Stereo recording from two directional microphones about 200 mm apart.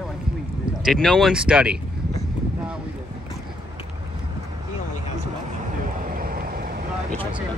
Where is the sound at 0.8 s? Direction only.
Centre (ahead or behind).